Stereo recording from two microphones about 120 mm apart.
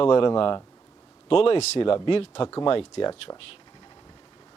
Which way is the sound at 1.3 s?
50° left (ahead or behind).